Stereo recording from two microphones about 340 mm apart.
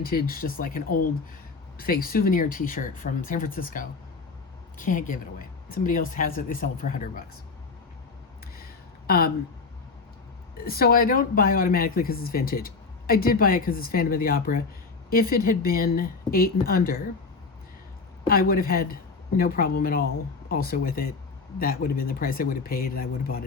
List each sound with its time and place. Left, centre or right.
0.0 s speech: left
8.5 s a sound: left
10.6 s speech: left
18.3 s speech: left